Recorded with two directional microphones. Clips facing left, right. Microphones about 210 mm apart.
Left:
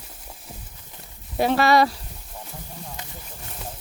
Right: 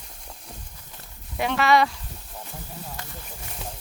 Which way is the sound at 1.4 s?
35° left (ahead or behind).